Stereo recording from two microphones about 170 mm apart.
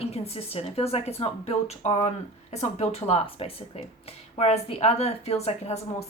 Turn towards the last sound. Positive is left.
turn(degrees=40)  # may be behind; listen again after turning